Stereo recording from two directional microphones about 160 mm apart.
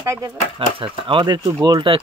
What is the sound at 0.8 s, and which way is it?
Speech, 30° right (ahead or behind).